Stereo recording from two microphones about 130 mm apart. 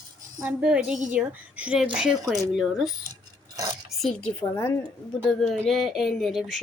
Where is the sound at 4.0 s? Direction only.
5° left (ahead or behind).